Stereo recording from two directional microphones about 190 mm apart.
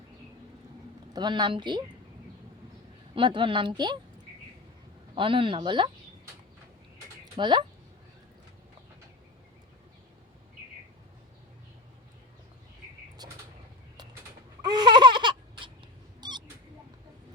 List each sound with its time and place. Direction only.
1.1 s speech: 25° right (ahead or behind)
3.2 s speech: 25° right (ahead or behind)
5.1 s speech: 25° right (ahead or behind)
7.3 s speech: 25° right (ahead or behind)
13.2 s vehicle: 20° right (ahead or behind)
14.7 s laughter: 25° right (ahead or behind)
16.2 s cat: 20° right (ahead or behind)